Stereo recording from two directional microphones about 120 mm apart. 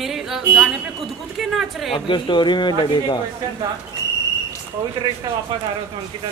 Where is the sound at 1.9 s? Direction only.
45° left (ahead or behind).